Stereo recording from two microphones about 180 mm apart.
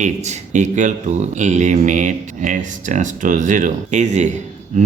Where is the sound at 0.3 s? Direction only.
45° right (ahead or behind).